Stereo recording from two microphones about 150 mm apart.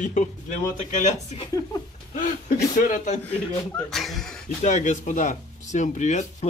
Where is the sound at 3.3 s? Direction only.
5° left (ahead or behind).